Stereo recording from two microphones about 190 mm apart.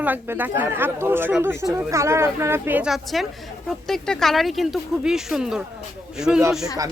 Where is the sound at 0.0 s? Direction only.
10° right (ahead or behind).